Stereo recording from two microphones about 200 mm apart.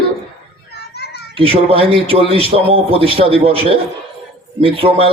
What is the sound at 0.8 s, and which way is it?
Children playing, 55° left (ahead or behind).